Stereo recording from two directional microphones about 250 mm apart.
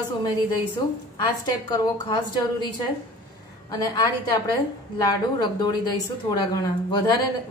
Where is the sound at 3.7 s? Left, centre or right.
Centre.